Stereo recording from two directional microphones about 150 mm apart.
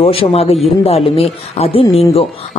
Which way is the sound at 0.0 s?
40° left (ahead or behind).